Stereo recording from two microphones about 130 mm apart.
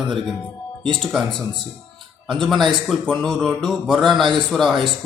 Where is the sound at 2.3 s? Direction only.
Centre (ahead or behind).